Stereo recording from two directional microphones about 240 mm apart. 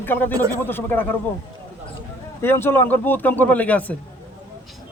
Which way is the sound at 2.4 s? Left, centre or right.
Centre.